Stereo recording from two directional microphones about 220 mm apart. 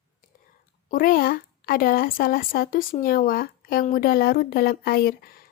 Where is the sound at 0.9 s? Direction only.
40° left (ahead or behind).